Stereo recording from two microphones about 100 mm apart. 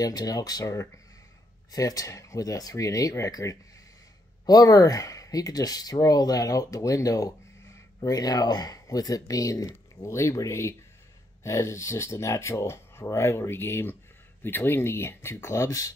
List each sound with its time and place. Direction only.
0.0 s speech: 40° left (ahead or behind)